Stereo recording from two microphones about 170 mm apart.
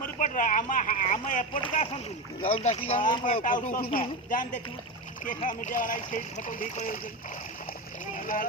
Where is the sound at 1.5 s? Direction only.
35° left (ahead or behind).